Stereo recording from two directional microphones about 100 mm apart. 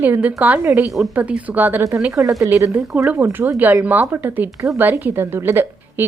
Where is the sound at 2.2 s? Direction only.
30° right (ahead or behind).